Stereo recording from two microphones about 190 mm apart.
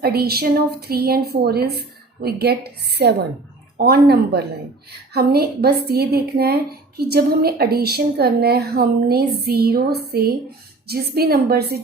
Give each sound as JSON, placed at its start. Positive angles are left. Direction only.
{"t": 0.0, "sound": "speech", "side_deg": -55}